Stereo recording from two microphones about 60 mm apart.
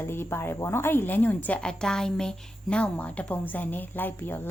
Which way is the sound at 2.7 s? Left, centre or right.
Left.